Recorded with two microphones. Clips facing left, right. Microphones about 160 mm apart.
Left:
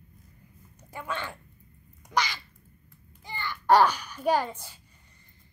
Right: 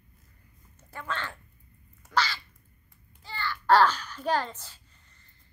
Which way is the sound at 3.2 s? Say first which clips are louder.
Left 1 dB; 15° left (ahead or behind).